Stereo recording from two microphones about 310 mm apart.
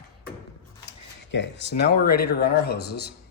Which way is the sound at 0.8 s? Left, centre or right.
Left.